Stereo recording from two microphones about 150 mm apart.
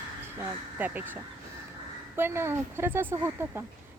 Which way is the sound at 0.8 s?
10° right (ahead or behind).